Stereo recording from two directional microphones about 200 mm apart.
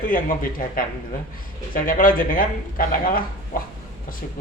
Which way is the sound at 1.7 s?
45° left (ahead or behind).